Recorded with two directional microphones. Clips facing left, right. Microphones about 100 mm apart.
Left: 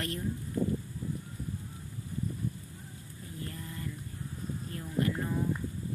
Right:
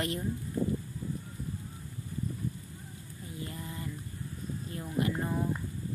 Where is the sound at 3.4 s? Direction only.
10° right (ahead or behind).